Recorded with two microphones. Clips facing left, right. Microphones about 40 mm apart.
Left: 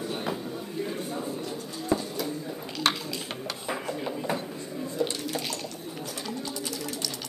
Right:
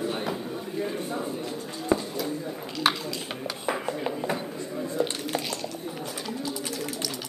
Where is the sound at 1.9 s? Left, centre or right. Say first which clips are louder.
Right 2 dB; right.